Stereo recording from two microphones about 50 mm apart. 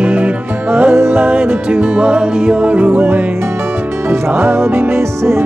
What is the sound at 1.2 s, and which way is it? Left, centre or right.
Music, right.